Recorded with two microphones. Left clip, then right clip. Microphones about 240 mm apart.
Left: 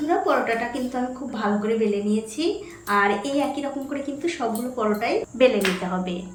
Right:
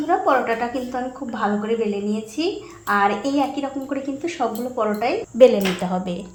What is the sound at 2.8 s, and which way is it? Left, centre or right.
A woman's voice, centre.